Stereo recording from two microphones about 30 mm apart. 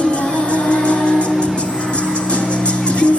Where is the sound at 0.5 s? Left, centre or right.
Left.